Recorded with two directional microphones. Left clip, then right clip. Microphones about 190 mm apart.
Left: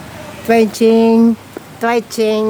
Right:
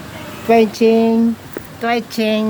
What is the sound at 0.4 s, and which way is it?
Speech, 50° left (ahead or behind).